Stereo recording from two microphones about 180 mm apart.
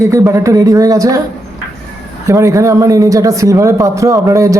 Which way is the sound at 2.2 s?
15° right (ahead or behind).